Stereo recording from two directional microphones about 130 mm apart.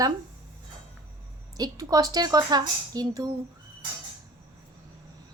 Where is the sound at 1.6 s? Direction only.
30° right (ahead or behind).